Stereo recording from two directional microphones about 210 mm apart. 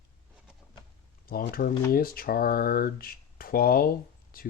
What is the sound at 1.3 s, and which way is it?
Speech, 45° left (ahead or behind).